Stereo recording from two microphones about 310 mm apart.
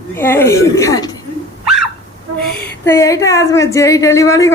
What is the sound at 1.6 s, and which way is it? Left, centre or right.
Dog, centre.